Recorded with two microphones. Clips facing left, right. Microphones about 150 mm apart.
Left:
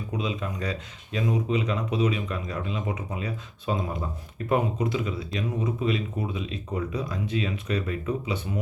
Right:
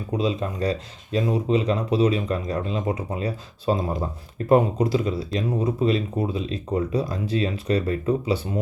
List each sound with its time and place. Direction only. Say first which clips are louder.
0.1 s speech: right 7 dB; 35° right (ahead or behind)